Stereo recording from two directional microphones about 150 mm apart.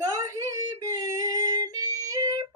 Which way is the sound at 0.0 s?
20° right (ahead or behind).